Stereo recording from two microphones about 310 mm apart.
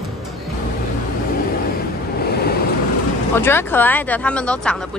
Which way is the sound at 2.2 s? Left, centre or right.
Left.